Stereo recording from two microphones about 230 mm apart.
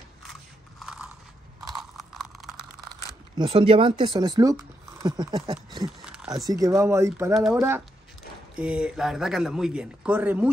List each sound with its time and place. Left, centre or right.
0.7 s biting: centre
3.3 s speech: right
5.9 s a sound: centre
6.5 s a man's voice: centre